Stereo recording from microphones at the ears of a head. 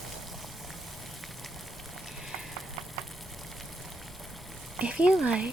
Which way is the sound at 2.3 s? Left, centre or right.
Right.